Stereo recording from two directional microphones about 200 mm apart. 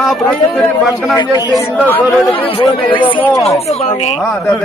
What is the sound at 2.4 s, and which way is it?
Speech, 25° left (ahead or behind).